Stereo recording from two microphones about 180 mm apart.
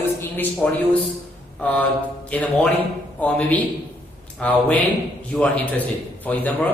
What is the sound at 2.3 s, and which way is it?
A man's voice, 10° left (ahead or behind).